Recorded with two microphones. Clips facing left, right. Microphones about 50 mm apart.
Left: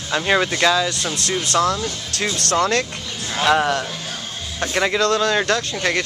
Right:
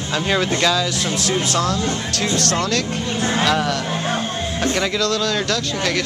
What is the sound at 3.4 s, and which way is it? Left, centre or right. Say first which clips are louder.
Speech: left 7 dB; centre.